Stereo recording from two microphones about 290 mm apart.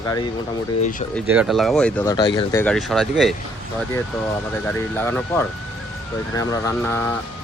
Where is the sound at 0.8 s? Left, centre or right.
Left.